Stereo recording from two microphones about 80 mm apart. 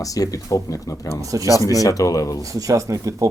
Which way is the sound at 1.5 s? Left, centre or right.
Left.